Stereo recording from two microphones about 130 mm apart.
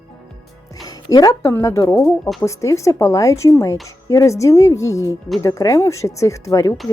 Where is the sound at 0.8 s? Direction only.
30° left (ahead or behind).